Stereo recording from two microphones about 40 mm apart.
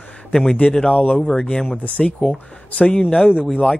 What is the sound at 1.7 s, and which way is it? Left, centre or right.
Speech, left.